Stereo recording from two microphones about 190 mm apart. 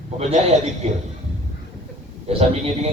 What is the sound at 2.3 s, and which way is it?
Speech, 30° right (ahead or behind).